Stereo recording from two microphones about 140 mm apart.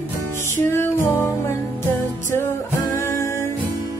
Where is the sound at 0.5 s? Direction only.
20° left (ahead or behind).